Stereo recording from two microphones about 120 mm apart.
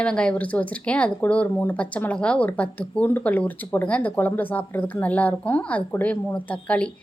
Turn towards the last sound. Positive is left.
turn(degrees=10)  # may be behind; listen again after turning